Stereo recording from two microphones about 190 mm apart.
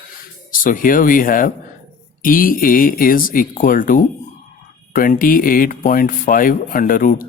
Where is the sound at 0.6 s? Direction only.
45° left (ahead or behind).